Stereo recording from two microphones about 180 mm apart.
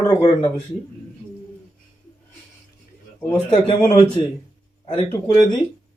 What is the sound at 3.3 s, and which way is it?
Speech, 30° left (ahead or behind).